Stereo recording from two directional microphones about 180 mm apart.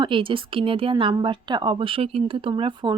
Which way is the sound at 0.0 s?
30° right (ahead or behind).